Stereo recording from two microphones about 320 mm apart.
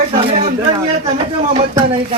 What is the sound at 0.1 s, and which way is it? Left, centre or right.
Speech, centre.